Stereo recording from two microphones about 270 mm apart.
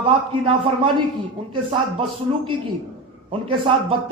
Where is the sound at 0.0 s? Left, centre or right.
Centre.